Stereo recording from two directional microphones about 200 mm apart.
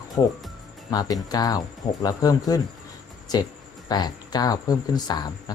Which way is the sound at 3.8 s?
20° left (ahead or behind).